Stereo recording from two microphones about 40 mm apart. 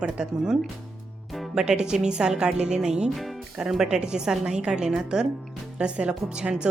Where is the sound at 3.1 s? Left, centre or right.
Centre.